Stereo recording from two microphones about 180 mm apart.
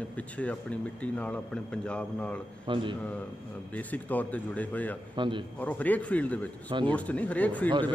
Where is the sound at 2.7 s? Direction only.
25° right (ahead or behind).